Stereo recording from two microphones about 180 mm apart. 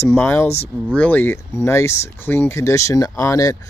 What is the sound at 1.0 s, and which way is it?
Speech, 10° left (ahead or behind).